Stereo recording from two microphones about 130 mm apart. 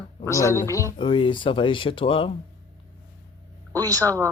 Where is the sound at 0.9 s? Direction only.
40° left (ahead or behind).